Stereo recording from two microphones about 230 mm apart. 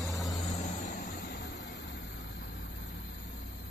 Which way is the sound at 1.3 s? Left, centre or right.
Left.